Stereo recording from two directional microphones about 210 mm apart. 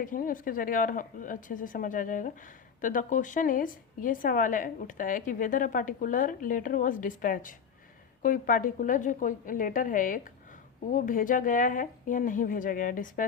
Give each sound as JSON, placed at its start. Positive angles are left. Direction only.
{"t": 0.0, "sound": "a woman's voice", "side_deg": 40}